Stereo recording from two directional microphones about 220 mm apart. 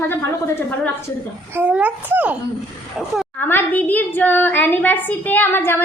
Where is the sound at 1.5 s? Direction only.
5° right (ahead or behind).